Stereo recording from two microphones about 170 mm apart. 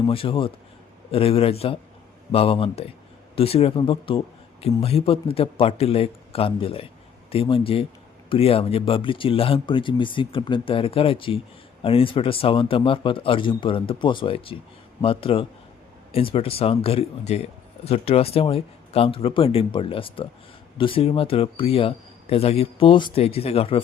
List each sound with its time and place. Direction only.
0.1 s speech: 30° left (ahead or behind)